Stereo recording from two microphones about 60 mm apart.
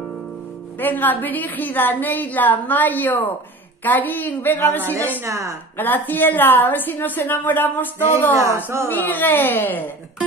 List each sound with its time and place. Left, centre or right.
0.7 s a woman's voice: left
5.2 s a woman's voice: right
5.8 s a woman's voice: left